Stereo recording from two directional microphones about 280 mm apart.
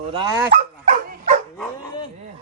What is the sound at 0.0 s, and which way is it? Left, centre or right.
Speech, centre.